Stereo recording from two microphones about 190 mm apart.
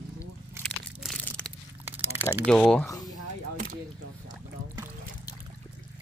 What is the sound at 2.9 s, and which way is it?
Speech, 20° left (ahead or behind).